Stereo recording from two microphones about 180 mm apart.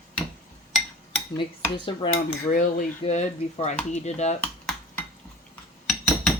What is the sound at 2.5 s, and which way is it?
Speech, 50° left (ahead or behind).